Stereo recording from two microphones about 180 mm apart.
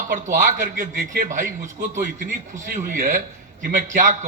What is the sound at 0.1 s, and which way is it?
A man's voice, 45° right (ahead or behind).